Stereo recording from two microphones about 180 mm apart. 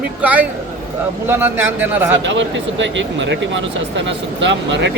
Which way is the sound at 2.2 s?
90° right.